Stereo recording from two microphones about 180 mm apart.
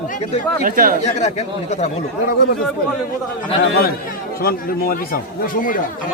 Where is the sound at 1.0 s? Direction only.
40° left (ahead or behind).